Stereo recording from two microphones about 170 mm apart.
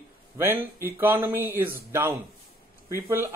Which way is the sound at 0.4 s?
10° right (ahead or behind).